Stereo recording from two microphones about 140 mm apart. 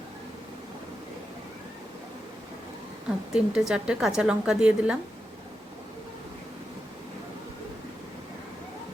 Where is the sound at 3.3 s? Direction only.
5° right (ahead or behind).